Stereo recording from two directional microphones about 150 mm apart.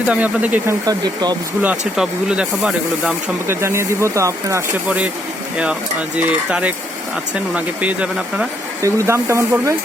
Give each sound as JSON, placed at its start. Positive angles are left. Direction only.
{"t": 0.1, "sound": "speech", "side_deg": -10}
{"t": 0.9, "sound": "speech", "side_deg": -25}
{"t": 2.0, "sound": "speech", "side_deg": -5}
{"t": 3.4, "sound": "speech", "side_deg": -15}
{"t": 6.1, "sound": "speech", "side_deg": -10}
{"t": 8.8, "sound": "speech", "side_deg": -20}